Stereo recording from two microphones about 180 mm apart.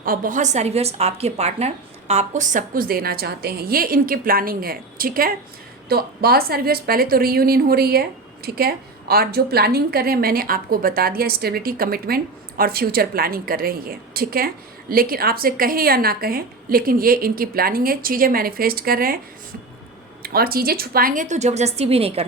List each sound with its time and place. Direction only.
0.0 s a woman's voice: 50° right (ahead or behind)
20.2 s a woman's voice: 55° right (ahead or behind); by 22.2 s 35° right (ahead or behind)